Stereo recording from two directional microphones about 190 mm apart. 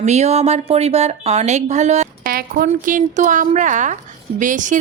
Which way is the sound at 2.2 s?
50° right (ahead or behind).